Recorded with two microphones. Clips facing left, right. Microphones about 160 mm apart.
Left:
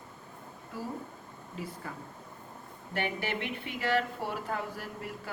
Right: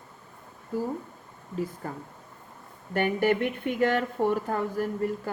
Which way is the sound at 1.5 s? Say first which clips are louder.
Right 9 dB; 45° right (ahead or behind).